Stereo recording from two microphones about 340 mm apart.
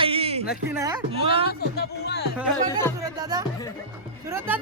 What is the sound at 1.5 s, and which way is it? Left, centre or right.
Speech, left.